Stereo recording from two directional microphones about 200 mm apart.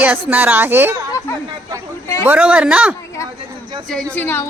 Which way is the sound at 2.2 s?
10° right (ahead or behind).